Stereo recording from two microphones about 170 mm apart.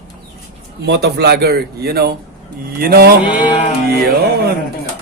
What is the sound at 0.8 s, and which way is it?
Speech, 80° right.